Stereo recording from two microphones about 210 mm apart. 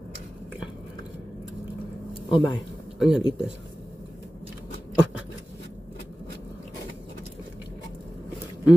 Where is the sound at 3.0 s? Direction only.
5° right (ahead or behind).